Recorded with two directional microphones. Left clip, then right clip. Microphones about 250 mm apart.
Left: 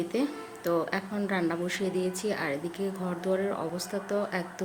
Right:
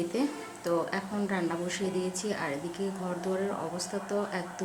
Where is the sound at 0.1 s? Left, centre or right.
Centre.